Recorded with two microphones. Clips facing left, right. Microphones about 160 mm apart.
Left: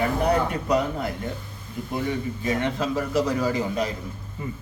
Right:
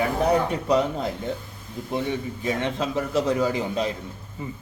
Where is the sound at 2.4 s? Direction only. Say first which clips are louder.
Left 1 dB; 20° right (ahead or behind).